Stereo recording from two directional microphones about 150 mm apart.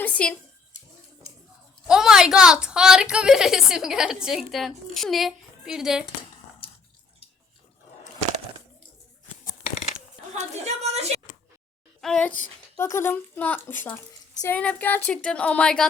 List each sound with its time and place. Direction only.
0.0 s speech: 10° left (ahead or behind)
1.9 s a woman's voice: 5° right (ahead or behind)
10.3 s a woman's voice: 50° right (ahead or behind)
11.9 s speech: 5° left (ahead or behind)